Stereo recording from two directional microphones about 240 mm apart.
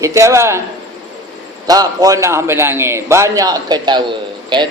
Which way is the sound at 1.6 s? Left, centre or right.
Centre.